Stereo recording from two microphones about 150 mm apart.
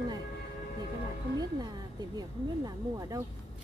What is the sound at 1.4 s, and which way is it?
Speech, 25° right (ahead or behind).